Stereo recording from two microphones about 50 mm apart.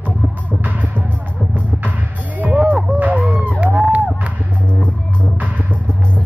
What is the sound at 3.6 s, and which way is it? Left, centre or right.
Music, right.